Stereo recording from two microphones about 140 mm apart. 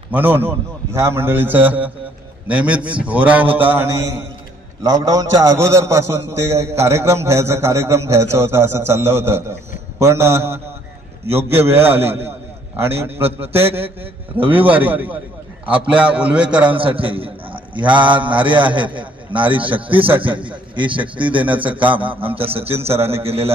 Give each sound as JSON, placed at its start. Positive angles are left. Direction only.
{"t": 0.1, "sound": "a man's voice", "side_deg": -15}
{"t": 4.8, "sound": "a man's voice", "side_deg": -25}
{"t": 16.7, "sound": "a man's voice", "side_deg": -40}
{"t": 21.5, "sound": "a man's voice", "side_deg": -10}
{"t": 22.3, "sound": "a man's voice", "side_deg": -40}